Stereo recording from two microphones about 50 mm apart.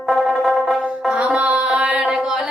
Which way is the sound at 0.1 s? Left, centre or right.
Centre.